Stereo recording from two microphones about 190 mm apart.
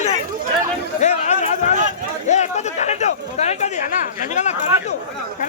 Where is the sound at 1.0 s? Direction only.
35° left (ahead or behind).